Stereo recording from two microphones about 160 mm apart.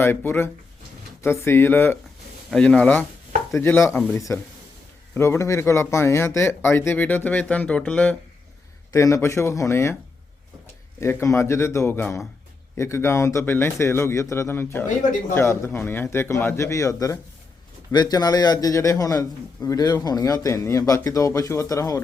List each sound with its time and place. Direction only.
0.0 s a man's voice: 15° left (ahead or behind)
8.9 s a man's voice: 20° left (ahead or behind)
11.0 s a man's voice: 20° left (ahead or behind)